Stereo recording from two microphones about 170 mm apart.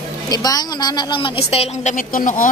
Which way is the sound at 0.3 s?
25° left (ahead or behind).